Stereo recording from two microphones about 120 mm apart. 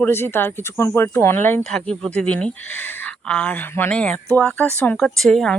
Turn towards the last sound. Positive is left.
turn(degrees=5)  # may be behind; listen again after turning